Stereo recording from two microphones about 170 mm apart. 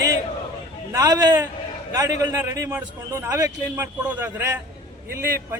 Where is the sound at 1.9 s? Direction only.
20° right (ahead or behind).